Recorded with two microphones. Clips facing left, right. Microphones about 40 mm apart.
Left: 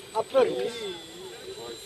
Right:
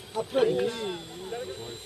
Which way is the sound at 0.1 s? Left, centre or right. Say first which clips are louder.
Left 3 dB; left.